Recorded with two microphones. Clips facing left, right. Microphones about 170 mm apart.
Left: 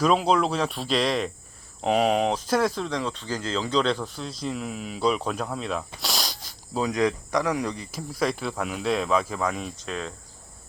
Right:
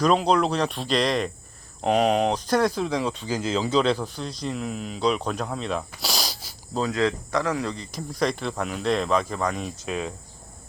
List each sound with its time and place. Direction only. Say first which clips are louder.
0.0 s speech: right 1 dB; 5° left (ahead or behind)
6.0 s snake: right 1 dB; centre (ahead or behind)
6.7 s speech: even; 15° left (ahead or behind); by 10.2 s 10° right (ahead or behind)